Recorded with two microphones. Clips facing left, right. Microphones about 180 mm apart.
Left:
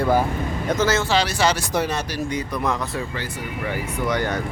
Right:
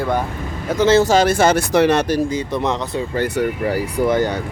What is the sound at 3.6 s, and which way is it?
Speech, 40° right (ahead or behind).